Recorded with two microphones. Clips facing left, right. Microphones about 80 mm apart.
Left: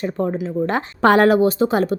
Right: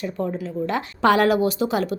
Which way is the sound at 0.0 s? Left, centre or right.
Left.